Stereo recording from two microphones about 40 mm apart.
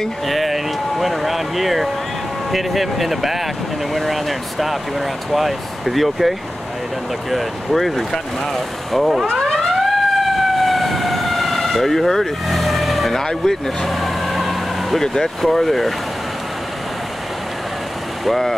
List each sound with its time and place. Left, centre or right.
0.3 s a sound: centre
2.5 s speech: centre
9.5 s emergency vehicle: centre
13.2 s speech: centre
13.8 s vehicle: centre
15.0 s speech: centre
18.2 s speech: centre